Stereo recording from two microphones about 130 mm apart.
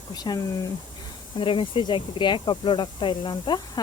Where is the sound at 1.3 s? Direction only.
40° left (ahead or behind).